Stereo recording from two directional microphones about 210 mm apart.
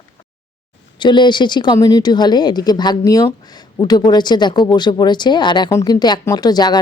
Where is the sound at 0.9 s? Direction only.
20° left (ahead or behind).